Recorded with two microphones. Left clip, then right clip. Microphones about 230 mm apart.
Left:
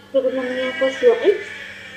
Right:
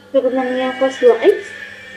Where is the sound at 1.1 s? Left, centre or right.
Right.